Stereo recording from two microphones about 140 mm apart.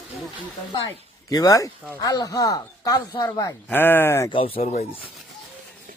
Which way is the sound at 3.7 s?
15° left (ahead or behind).